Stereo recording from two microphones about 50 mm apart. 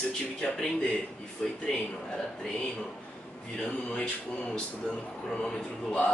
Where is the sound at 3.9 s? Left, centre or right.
Left.